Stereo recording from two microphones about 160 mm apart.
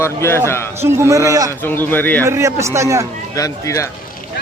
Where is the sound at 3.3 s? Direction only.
20° left (ahead or behind).